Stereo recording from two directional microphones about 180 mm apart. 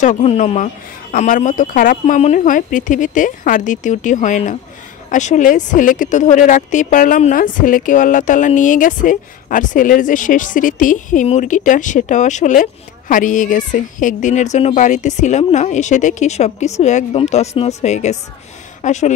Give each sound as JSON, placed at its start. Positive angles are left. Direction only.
{"t": 0.0, "sound": "a woman's voice", "side_deg": 40}